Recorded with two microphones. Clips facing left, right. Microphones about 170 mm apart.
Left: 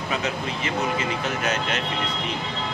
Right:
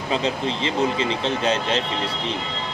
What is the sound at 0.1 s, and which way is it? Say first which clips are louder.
A man's voice: right 5 dB; 25° right (ahead or behind).